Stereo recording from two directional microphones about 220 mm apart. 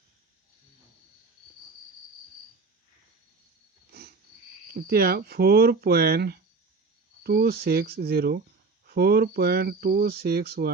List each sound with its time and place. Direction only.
4.7 s speech: 45° right (ahead or behind)